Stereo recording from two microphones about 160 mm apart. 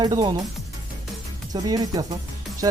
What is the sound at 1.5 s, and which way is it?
Speech, 25° right (ahead or behind).